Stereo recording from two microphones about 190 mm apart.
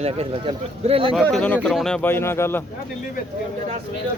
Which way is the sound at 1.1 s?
5° left (ahead or behind).